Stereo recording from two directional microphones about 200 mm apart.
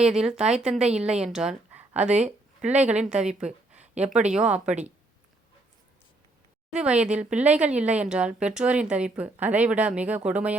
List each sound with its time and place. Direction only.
0.0 s speech: 5° right (ahead or behind)
6.7 s speech: 5° right (ahead or behind)